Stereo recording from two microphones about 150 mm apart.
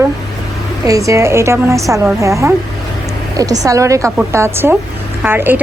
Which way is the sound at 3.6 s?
20° right (ahead or behind).